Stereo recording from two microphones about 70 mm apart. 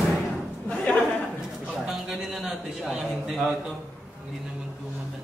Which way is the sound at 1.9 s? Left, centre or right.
Centre.